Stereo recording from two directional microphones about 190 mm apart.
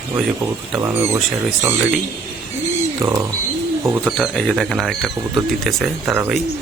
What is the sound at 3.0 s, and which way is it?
Speech, 15° right (ahead or behind).